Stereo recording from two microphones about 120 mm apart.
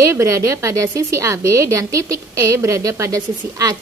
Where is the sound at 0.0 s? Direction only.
25° right (ahead or behind).